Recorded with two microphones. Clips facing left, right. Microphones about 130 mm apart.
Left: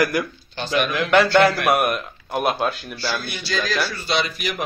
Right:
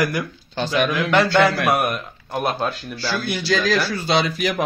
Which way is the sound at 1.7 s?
20° left (ahead or behind).